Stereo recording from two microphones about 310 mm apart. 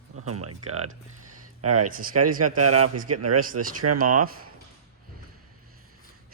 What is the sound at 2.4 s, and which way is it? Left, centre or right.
Speech, right.